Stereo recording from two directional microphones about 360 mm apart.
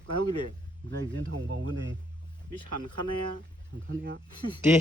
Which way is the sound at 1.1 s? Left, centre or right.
Right.